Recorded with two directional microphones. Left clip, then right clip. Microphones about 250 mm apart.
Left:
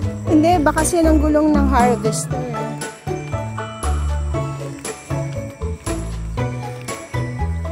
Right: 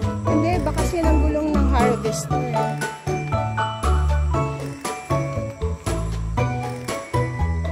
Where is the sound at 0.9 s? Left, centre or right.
Centre.